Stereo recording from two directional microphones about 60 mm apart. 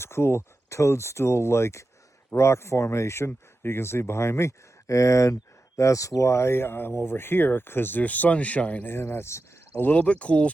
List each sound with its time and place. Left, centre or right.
0.0 s speech: left
8.9 s speech: left
9.8 s speech: left